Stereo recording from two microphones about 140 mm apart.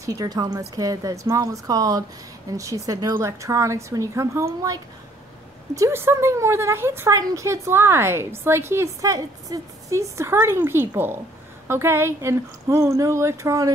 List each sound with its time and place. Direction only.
0.0 s a woman's voice: 25° right (ahead or behind)